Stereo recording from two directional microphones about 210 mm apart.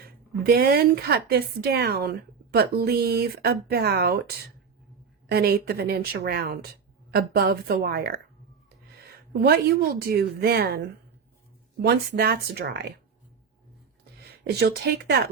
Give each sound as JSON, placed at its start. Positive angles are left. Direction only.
{"t": 0.4, "sound": "speech", "side_deg": -45}
{"t": 5.3, "sound": "speech", "side_deg": -50}
{"t": 14.5, "sound": "speech", "side_deg": -50}